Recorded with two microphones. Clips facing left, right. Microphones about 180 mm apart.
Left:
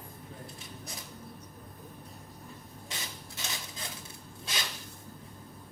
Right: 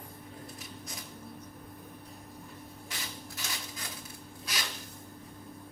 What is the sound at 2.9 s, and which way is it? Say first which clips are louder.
Rub: even; 25° left (ahead or behind).